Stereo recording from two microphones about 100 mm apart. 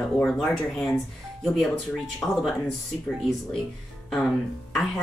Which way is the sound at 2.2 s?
15° left (ahead or behind).